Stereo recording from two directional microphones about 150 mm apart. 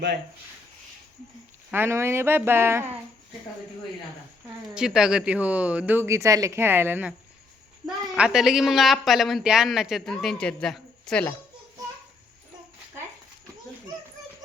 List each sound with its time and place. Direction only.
1.7 s speech: 15° right (ahead or behind)
4.7 s speech: 5° right (ahead or behind)
8.1 s speech: 5° right (ahead or behind)